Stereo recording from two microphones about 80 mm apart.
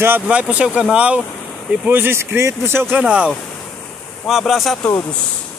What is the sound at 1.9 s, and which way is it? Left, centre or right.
Speech, right.